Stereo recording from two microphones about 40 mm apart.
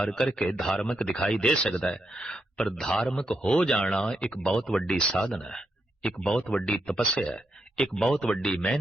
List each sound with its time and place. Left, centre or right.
0.2 s a man's voice: centre